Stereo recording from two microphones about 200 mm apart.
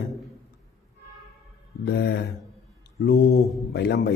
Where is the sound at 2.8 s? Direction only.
50° left (ahead or behind).